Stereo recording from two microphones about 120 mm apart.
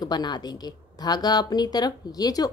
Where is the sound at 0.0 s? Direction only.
35° left (ahead or behind).